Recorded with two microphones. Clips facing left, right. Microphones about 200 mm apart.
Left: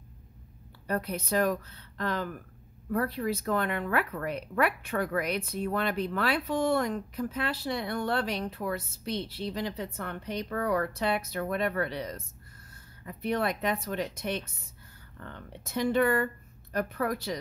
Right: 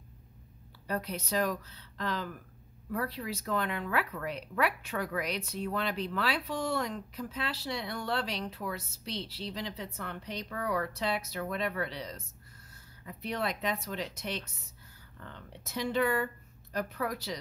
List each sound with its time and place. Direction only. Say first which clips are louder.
0.8 s speech: left 4 dB; 55° left (ahead or behind)